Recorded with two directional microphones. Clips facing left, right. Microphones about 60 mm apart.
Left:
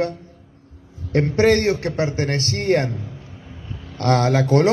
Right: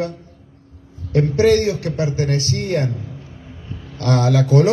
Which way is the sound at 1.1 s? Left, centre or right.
Left.